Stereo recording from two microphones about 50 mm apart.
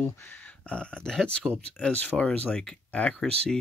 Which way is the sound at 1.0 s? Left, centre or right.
Centre.